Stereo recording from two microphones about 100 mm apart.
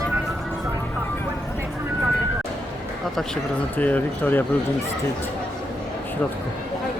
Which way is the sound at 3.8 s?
15° left (ahead or behind).